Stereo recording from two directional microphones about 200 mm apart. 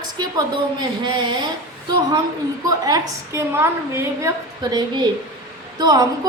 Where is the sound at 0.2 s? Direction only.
20° right (ahead or behind).